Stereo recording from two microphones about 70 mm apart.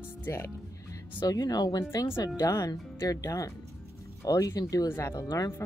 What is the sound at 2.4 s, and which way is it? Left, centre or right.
Speech, left.